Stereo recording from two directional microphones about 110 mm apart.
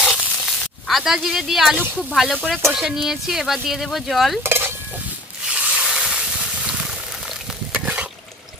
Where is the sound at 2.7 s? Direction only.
5° right (ahead or behind).